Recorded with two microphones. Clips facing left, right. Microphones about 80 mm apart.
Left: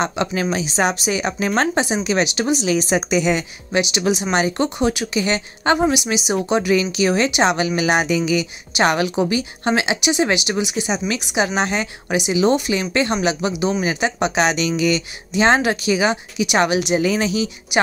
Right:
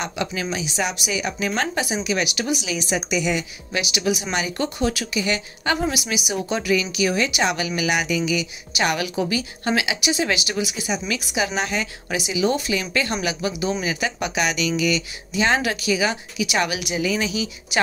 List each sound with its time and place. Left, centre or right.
0.0 s speech: left
4.6 s a woman's voice: left